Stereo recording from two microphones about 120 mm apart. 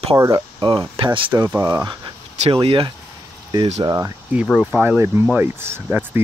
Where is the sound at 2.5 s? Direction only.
45° right (ahead or behind).